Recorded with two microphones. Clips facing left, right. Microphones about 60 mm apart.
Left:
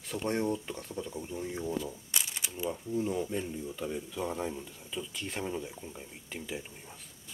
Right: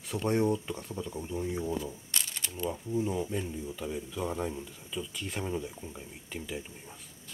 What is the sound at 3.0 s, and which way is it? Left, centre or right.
Speech, centre.